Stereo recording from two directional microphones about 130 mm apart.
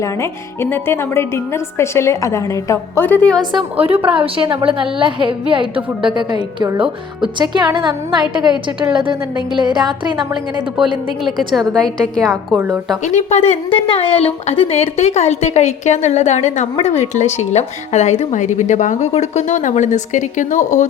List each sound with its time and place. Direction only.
0.0 s a woman's voice: 20° left (ahead or behind)
3.5 s a woman's voice: 50° right (ahead or behind); by 10.2 s 35° right (ahead or behind)
11.3 s a woman's voice: centre (ahead or behind)
13.1 s a woman's voice: 60° left (ahead or behind)
13.7 s a woman's voice: 40° left (ahead or behind); by 19.0 s 70° left (ahead or behind)
19.1 s a woman's voice: 55° left (ahead or behind); by 20.8 s 75° left (ahead or behind)